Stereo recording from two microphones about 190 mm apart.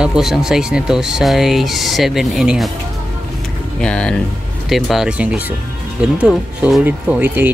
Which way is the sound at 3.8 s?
5° left (ahead or behind).